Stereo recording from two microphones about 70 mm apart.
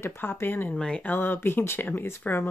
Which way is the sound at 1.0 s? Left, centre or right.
Left.